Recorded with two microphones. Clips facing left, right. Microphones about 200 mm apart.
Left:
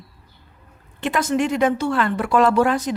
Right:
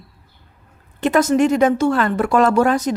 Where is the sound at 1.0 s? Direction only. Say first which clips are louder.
Right 6 dB; 40° right (ahead or behind).